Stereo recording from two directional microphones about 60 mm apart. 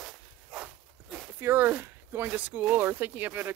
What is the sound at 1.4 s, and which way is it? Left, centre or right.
Speech, right.